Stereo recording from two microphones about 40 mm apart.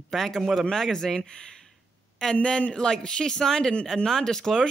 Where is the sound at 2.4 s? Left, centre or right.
Left.